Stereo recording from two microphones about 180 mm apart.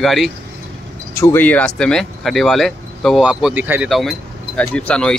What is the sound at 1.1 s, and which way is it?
Speech, 15° left (ahead or behind).